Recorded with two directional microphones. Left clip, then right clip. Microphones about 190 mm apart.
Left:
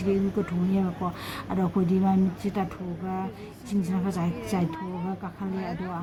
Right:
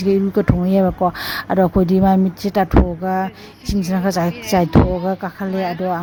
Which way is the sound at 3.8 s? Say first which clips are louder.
Right 15 dB; 50° right (ahead or behind).